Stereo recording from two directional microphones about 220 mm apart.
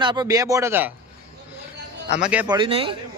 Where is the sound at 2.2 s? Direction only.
5° right (ahead or behind).